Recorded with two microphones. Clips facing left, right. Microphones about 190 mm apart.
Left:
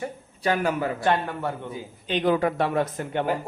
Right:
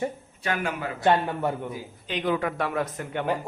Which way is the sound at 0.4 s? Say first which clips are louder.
Left 5 dB; 35° left (ahead or behind).